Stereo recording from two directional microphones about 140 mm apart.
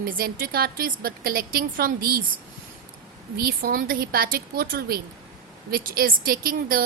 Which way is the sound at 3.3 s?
90° right.